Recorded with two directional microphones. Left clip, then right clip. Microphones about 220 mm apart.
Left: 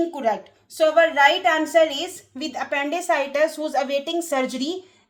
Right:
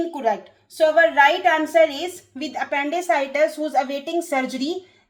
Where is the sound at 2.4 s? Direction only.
35° left (ahead or behind).